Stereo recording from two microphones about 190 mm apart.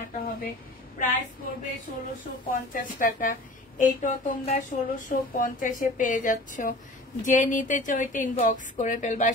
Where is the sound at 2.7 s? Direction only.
45° left (ahead or behind).